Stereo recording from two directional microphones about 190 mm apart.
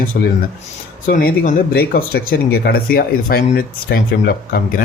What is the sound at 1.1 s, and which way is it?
Speech, 50° left (ahead or behind).